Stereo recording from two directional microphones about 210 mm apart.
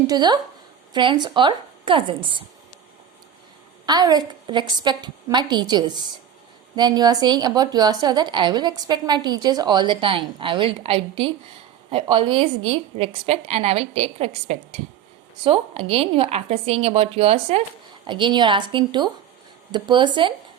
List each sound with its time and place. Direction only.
0.1 s a woman's voice: 20° right (ahead or behind)
3.8 s a woman's voice: 20° right (ahead or behind)